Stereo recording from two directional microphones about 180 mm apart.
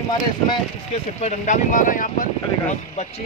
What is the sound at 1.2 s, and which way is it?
Speech, 45° left (ahead or behind).